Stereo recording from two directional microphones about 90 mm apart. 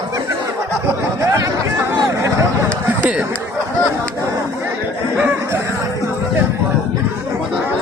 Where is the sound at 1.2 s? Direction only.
35° right (ahead or behind).